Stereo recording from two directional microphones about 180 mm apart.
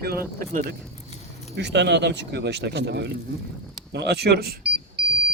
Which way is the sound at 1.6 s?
70° right (ahead or behind).